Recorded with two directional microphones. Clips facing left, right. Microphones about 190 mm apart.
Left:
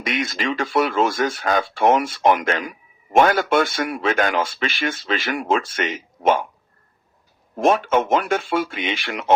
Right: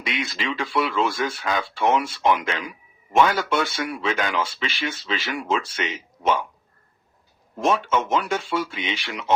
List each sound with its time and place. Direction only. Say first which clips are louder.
0.0 s speech: left 4 dB; 50° left (ahead or behind)
7.5 s speech: left 4 dB; 55° left (ahead or behind)